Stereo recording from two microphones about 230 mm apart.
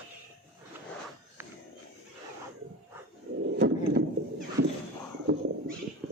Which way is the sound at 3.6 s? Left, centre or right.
Right.